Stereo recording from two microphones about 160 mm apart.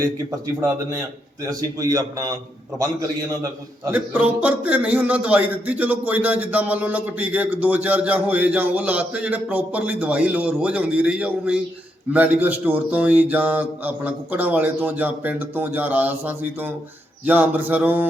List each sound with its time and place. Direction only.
0.0 s speech: 20° right (ahead or behind)
3.9 s a man's voice: 10° right (ahead or behind)